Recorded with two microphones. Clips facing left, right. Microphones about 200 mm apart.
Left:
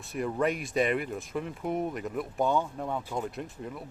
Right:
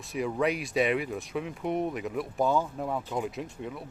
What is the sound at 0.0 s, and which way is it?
Speech, centre (ahead or behind).